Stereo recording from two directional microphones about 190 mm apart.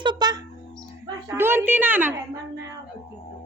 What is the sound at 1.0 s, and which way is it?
Speech, 15° right (ahead or behind).